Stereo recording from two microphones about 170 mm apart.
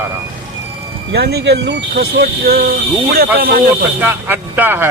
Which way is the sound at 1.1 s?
75° right (ahead or behind).